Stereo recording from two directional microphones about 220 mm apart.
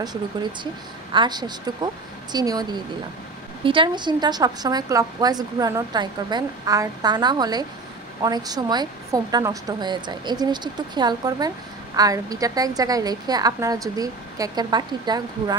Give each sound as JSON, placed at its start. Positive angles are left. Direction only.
{"t": 0.0, "sound": "a woman's voice", "side_deg": -20}